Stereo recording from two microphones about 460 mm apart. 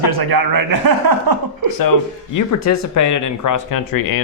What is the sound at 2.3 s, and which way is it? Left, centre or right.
Speech, left.